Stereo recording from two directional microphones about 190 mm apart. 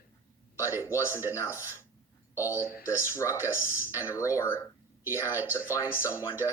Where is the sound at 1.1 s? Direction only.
10° right (ahead or behind).